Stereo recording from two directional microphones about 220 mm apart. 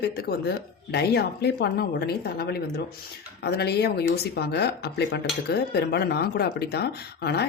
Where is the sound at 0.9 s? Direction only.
45° left (ahead or behind).